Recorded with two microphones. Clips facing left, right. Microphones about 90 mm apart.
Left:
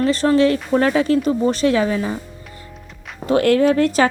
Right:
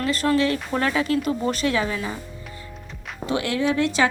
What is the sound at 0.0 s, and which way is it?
Speech, 35° left (ahead or behind).